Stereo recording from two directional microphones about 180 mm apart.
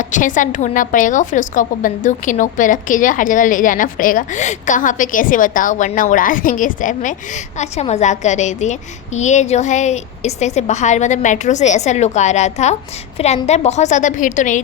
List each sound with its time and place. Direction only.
0.0 s a woman's voice: 45° left (ahead or behind)